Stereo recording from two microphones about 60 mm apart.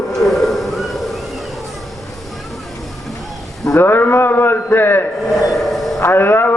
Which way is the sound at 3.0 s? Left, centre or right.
Centre.